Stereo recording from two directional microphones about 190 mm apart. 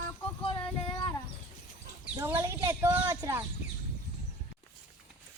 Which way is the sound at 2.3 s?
15° right (ahead or behind).